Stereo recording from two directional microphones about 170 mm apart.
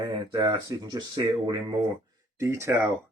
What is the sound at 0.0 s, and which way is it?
Speech, 25° right (ahead or behind).